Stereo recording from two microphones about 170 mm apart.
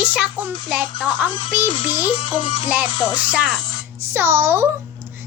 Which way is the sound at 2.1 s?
30° left (ahead or behind).